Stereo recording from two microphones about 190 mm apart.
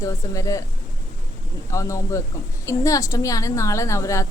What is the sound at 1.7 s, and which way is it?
A woman's voice, 15° left (ahead or behind).